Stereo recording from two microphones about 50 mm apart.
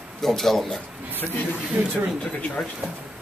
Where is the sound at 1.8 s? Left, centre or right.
Right.